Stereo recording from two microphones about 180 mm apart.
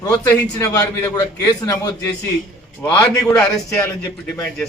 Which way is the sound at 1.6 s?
20° left (ahead or behind).